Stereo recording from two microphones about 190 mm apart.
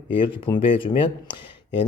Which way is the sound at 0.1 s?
25° left (ahead or behind).